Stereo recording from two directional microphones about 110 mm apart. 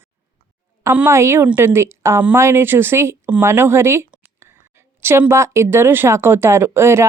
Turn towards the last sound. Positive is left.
turn(degrees=-20)  # may be behind; listen again after turning